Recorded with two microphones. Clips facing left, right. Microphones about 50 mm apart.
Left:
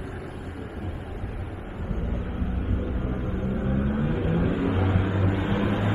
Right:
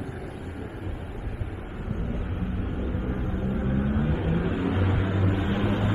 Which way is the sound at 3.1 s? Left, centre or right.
Centre.